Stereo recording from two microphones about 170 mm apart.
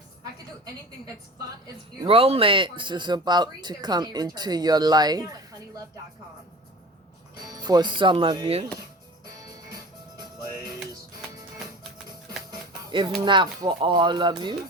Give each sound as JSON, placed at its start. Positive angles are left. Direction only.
{"t": 2.0, "sound": "speech", "side_deg": -35}
{"t": 7.4, "sound": "speech", "side_deg": -25}
{"t": 10.5, "sound": "music", "side_deg": -20}
{"t": 12.5, "sound": "a sound", "side_deg": -25}
{"t": 13.2, "sound": "speech", "side_deg": -30}